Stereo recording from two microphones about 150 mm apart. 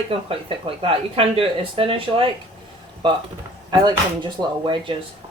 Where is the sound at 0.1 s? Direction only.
35° right (ahead or behind).